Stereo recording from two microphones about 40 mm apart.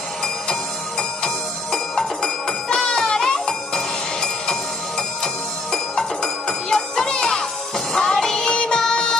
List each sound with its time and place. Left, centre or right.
0.5 s music: centre